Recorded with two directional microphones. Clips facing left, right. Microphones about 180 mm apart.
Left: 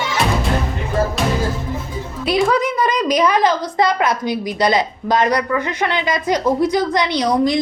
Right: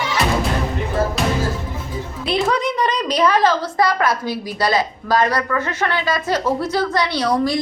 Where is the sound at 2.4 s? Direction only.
5° left (ahead or behind).